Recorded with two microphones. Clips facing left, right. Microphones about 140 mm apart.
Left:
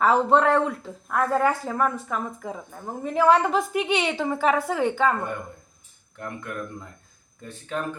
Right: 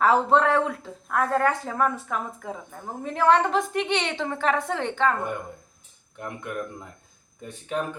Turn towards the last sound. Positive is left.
turn(degrees=-15)  # may be behind; listen again after turning